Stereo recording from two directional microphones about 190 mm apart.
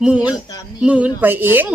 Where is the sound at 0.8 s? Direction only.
5° right (ahead or behind).